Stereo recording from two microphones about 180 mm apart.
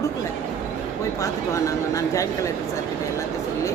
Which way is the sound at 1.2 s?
20° left (ahead or behind).